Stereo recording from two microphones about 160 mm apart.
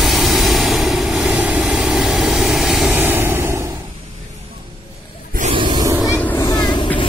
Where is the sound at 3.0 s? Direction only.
15° right (ahead or behind).